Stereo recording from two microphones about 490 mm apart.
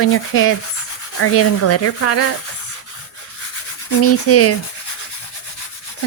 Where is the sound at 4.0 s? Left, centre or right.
Left.